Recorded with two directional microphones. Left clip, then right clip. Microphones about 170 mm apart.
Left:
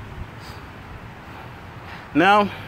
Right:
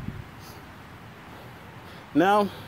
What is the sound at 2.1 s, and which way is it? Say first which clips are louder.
Speech: left 5 dB; 15° right (ahead or behind).